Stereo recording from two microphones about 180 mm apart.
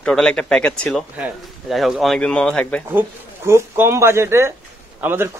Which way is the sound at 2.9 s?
10° right (ahead or behind).